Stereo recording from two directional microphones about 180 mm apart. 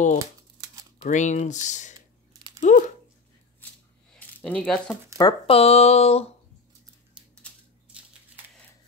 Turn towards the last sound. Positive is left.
turn(degrees=-5)  # may be behind; listen again after turning